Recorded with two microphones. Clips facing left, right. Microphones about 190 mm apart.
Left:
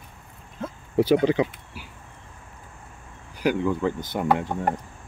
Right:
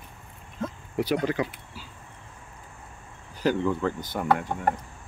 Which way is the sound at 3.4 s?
10° left (ahead or behind).